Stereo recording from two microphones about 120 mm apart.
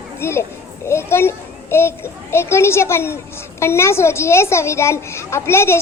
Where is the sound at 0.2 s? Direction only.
20° left (ahead or behind).